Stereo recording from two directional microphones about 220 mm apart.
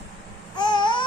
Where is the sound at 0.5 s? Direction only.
20° left (ahead or behind).